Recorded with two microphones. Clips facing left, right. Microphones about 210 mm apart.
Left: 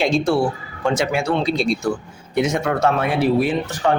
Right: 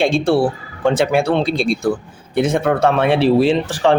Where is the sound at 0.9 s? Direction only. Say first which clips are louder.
Right 6 dB; 55° right (ahead or behind).